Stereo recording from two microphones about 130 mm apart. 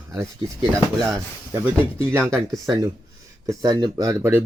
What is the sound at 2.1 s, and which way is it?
Speech, 5° left (ahead or behind).